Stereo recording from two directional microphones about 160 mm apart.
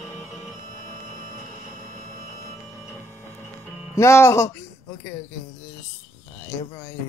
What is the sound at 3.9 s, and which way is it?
Speech, 15° left (ahead or behind).